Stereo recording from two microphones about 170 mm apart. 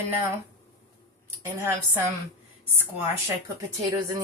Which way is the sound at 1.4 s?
15° right (ahead or behind).